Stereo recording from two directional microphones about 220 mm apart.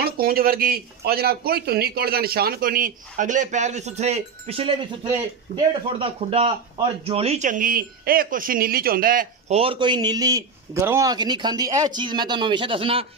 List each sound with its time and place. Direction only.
0.0 s speech: 40° right (ahead or behind)
9.6 s a man's voice: 25° right (ahead or behind)